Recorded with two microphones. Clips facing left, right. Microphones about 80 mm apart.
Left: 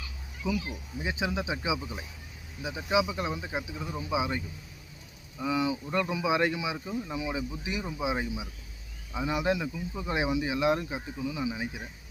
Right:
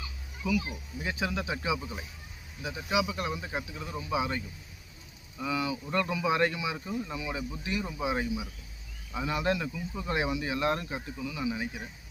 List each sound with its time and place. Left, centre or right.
0.4 s speech: left